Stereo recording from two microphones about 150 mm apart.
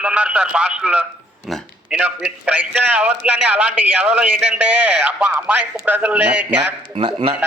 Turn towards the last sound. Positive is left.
turn(degrees=-35)  # may be behind; listen again after turning